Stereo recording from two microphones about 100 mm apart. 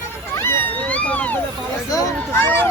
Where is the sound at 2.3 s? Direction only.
20° left (ahead or behind).